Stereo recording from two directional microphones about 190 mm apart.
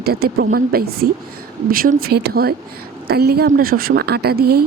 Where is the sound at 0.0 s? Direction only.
55° right (ahead or behind).